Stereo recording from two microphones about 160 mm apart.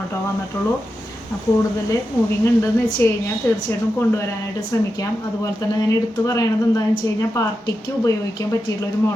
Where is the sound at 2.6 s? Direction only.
15° left (ahead or behind).